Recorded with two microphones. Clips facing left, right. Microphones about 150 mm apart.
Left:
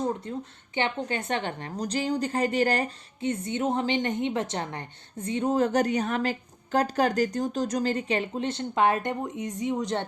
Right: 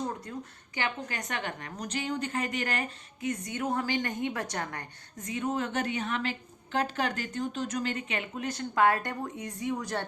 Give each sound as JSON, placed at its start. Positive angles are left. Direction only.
{"t": 0.3, "sound": "a woman's voice", "side_deg": 25}